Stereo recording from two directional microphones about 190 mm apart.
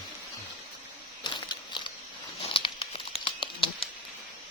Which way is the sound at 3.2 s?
30° left (ahead or behind).